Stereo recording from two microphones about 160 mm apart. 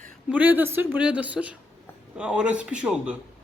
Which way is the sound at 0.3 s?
10° right (ahead or behind).